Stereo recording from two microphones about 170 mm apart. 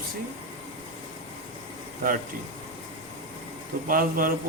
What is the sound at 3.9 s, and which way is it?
Speech, 55° right (ahead or behind).